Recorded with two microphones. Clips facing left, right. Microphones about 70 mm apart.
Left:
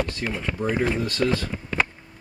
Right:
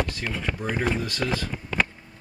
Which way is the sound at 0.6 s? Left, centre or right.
Left.